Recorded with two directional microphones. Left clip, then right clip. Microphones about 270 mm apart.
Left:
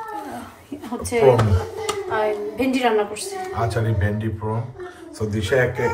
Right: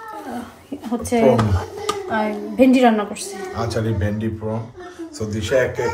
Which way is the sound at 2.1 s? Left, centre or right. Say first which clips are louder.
Left 4 dB; right.